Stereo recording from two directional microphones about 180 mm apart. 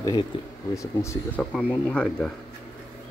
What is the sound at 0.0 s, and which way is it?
Speech, 25° left (ahead or behind).